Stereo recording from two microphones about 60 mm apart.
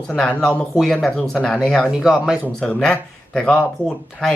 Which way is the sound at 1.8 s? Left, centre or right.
Centre.